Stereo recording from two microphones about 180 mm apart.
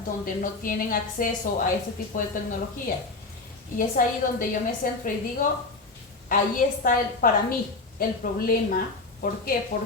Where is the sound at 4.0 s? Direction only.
50° left (ahead or behind).